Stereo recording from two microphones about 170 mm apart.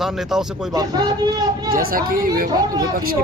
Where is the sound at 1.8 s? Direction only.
55° right (ahead or behind).